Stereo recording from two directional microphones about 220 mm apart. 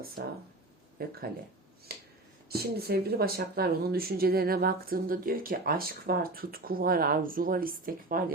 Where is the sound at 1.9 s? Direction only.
45° right (ahead or behind).